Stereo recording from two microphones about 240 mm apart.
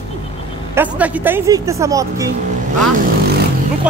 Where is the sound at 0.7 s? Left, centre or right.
Centre.